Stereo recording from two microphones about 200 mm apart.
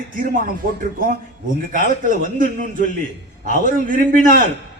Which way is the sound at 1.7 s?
40° right (ahead or behind).